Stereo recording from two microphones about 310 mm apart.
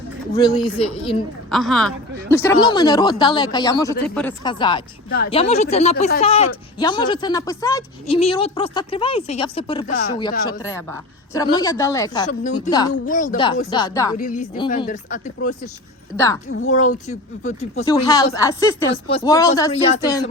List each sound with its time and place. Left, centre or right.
0.3 s speech: centre
1.5 s a woman's voice: centre
4.4 s speech: centre
12.3 s speech: left
14.2 s speech: left
16.1 s speech: centre
16.5 s speech: left
17.1 s speech: left